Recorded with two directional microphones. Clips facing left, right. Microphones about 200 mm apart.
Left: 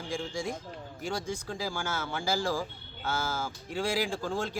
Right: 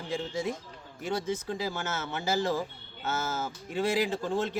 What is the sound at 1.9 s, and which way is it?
Speech, 25° right (ahead or behind).